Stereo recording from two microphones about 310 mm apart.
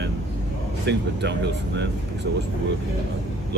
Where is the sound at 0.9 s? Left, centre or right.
Right.